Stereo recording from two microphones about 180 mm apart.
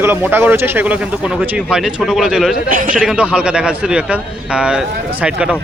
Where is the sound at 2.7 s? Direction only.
50° right (ahead or behind).